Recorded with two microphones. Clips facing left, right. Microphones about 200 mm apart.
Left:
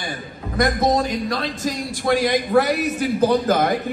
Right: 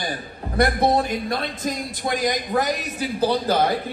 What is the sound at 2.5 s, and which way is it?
Speech, 20° right (ahead or behind).